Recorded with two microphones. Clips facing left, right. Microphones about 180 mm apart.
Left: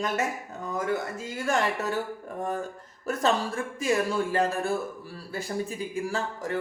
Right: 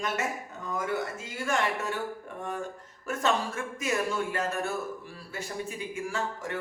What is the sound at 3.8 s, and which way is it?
Speech, 35° left (ahead or behind).